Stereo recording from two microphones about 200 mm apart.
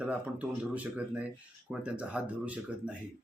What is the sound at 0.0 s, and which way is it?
Speech, 5° right (ahead or behind).